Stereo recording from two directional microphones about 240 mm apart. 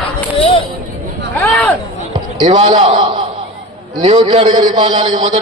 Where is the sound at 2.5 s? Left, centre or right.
Right.